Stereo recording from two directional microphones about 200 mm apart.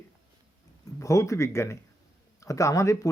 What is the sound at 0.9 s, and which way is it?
Speech, 15° left (ahead or behind).